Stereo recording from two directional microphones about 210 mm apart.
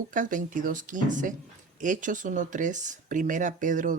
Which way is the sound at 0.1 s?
40° right (ahead or behind).